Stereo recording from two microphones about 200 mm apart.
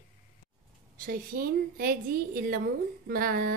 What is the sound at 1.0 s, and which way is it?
A woman's voice, 45° right (ahead or behind).